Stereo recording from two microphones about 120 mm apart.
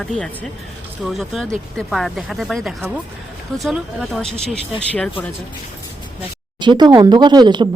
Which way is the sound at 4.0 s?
Centre (ahead or behind).